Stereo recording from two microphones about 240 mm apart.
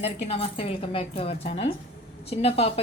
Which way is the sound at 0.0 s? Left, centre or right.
Left.